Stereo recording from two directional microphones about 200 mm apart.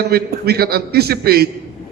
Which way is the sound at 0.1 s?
50° right (ahead or behind).